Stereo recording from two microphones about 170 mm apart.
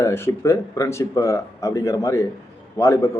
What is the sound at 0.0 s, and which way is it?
A man's voice, 15° left (ahead or behind).